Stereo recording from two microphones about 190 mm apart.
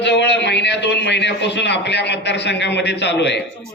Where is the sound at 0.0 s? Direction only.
65° left (ahead or behind).